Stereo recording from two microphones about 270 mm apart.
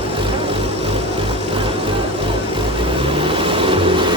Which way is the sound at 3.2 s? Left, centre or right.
Centre.